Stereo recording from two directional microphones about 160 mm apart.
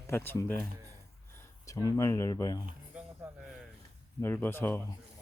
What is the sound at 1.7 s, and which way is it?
Speech, 20° left (ahead or behind).